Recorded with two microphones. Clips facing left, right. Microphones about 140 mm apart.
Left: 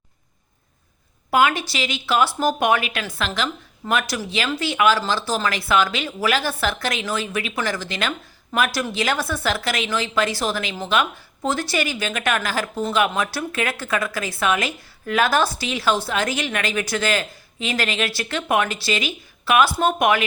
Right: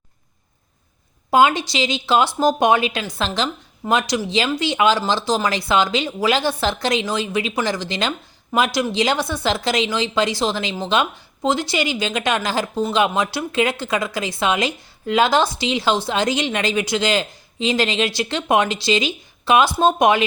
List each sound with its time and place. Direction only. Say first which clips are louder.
1.3 s speech: right 3 dB; 25° right (ahead or behind)
11.4 s speech: right 3 dB; 15° right (ahead or behind)